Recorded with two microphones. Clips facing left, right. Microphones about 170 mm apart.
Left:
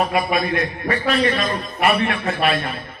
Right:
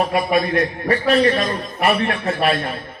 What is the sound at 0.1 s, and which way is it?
A man's voice, 35° right (ahead or behind).